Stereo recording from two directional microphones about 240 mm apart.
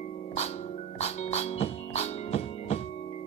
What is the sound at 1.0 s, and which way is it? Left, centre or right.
Music, left.